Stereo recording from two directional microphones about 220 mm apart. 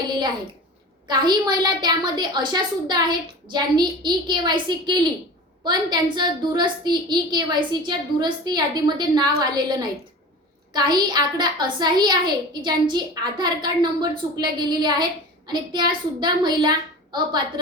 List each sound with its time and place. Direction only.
1.0 s a woman's voice: 20° right (ahead or behind)